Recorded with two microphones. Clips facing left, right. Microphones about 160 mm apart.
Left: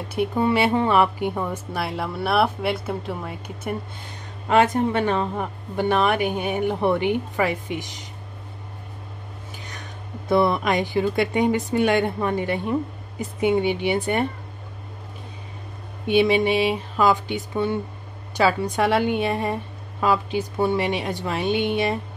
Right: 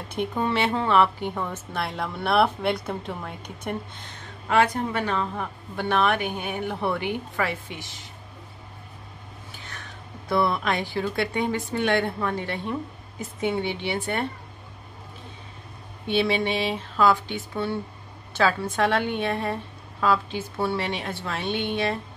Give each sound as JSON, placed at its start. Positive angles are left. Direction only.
{"t": 0.1, "sound": "a woman's voice", "side_deg": 10}
{"t": 4.5, "sound": "a woman's voice", "side_deg": 20}
{"t": 5.8, "sound": "a woman's voice", "side_deg": 15}
{"t": 9.7, "sound": "a woman's voice", "side_deg": 20}
{"t": 16.1, "sound": "a woman's voice", "side_deg": 15}